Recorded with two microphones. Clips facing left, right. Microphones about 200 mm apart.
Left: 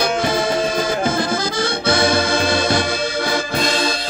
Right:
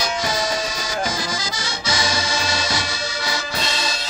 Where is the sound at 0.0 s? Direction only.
55° left (ahead or behind).